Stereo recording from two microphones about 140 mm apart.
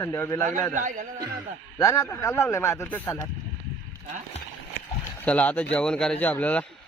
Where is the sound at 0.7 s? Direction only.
65° right (ahead or behind).